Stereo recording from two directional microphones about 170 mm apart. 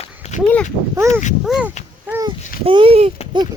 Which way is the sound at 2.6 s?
30° right (ahead or behind).